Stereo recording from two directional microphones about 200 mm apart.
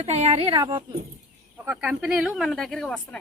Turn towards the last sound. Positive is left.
turn(degrees=5)  # may be behind; listen again after turning